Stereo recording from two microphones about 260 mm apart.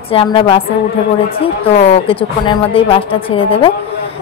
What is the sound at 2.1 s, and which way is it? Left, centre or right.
A woman's voice, left.